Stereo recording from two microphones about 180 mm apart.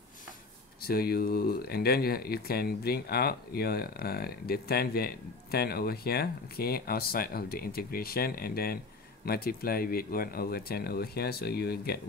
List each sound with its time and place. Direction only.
0.8 s speech: 60° left (ahead or behind)